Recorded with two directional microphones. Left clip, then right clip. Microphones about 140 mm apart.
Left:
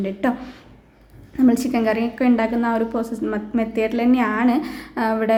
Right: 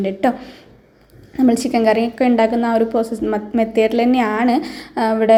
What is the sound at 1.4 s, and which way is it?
A woman's voice, 15° right (ahead or behind).